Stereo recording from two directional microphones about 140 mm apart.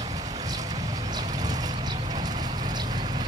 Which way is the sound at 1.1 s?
30° right (ahead or behind).